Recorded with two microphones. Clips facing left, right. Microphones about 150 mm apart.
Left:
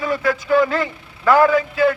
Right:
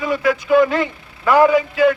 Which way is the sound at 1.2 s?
15° right (ahead or behind).